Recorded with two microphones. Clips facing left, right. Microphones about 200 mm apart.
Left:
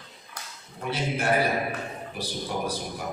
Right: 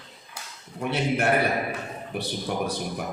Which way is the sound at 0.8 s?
60° right (ahead or behind).